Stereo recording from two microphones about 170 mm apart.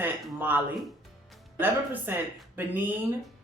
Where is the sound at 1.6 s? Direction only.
10° right (ahead or behind).